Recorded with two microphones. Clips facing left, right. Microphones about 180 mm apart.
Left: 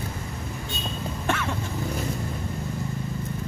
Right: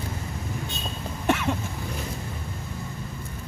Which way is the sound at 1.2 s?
15° right (ahead or behind).